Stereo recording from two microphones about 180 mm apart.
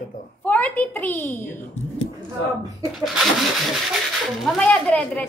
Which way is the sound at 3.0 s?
Centre (ahead or behind).